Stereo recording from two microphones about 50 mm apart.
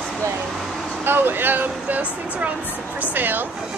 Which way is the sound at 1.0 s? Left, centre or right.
Right.